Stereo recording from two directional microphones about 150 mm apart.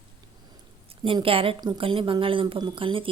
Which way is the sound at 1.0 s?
35° right (ahead or behind).